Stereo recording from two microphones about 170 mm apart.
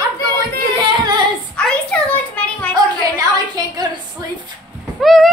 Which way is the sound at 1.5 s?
5° left (ahead or behind).